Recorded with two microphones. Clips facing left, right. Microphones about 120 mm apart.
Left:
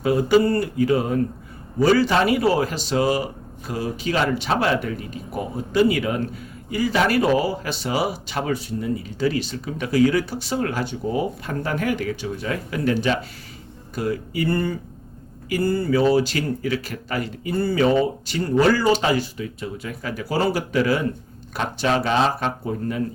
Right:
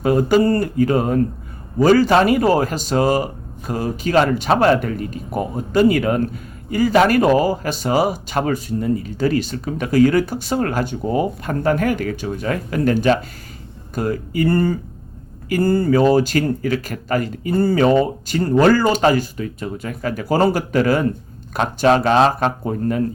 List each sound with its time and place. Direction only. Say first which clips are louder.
0.0 s speech: right 2 dB; 50° right (ahead or behind)